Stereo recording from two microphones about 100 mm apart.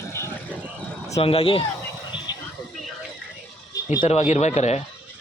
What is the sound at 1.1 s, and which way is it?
Speech, 75° left (ahead or behind).